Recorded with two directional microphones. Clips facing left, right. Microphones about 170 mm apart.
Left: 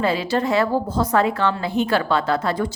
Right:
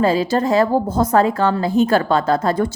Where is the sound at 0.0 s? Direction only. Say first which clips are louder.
Right 4 dB; 40° right (ahead or behind).